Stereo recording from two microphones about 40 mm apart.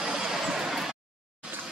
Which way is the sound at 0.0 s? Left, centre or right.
Centre.